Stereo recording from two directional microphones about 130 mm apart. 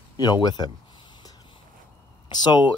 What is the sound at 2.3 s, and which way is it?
Speech, 35° left (ahead or behind).